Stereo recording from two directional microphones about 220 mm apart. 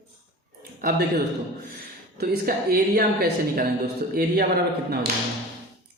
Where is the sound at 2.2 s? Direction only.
45° right (ahead or behind).